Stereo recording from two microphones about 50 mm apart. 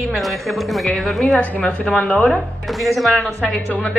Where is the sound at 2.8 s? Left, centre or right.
Centre.